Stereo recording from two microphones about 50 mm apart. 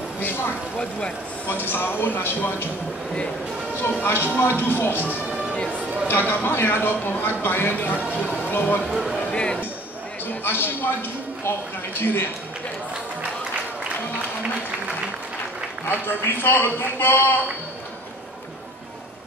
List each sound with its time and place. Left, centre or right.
0.2 s speech: left
0.7 s speech: centre
1.7 s a man's voice: left
4.0 s a man's voice: left
4.9 s speech: right
6.0 s a man's voice: left
9.3 s a sound: left
10.2 s a man's voice: left
15.9 s a man's voice: left